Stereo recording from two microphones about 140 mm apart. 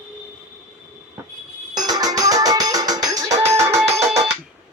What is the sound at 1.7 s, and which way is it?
Music, 30° right (ahead or behind).